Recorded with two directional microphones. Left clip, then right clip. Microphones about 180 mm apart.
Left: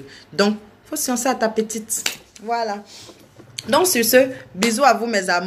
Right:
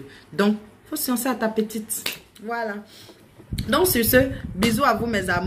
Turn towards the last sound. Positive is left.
turn(degrees=-15)  # may be behind; listen again after turning